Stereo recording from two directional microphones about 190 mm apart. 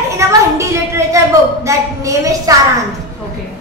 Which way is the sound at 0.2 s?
15° right (ahead or behind).